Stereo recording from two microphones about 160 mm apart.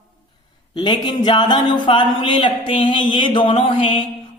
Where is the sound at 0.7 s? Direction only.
30° left (ahead or behind).